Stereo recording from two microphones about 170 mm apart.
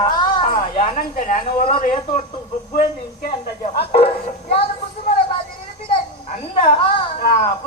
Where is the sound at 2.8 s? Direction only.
50° left (ahead or behind).